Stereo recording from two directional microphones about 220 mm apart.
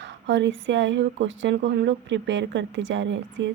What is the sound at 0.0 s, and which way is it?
A woman's voice, 55° right (ahead or behind).